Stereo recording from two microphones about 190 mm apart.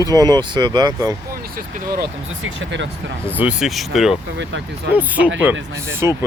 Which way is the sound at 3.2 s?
10° right (ahead or behind).